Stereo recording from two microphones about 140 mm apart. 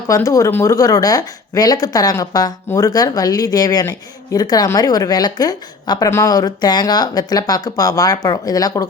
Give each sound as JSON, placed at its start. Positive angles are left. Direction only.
{"t": 0.1, "sound": "a woman's voice", "side_deg": 25}